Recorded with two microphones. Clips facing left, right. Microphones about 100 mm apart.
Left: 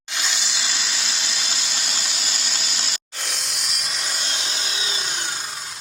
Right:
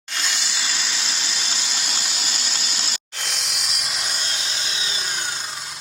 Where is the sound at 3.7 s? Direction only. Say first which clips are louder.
Right 1 dB; 30° right (ahead or behind).